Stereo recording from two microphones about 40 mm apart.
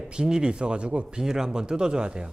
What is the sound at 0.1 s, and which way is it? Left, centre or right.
Speech, right.